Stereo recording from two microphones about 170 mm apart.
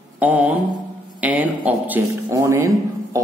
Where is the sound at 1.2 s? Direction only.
10° right (ahead or behind).